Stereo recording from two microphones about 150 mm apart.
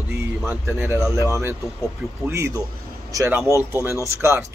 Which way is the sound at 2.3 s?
20° right (ahead or behind).